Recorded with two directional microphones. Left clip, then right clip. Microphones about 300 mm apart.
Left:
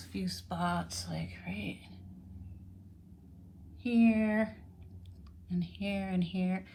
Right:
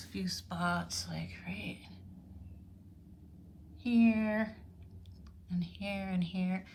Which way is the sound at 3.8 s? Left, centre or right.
Centre.